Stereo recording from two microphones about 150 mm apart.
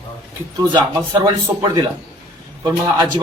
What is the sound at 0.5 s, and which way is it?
A man's voice, 30° right (ahead or behind).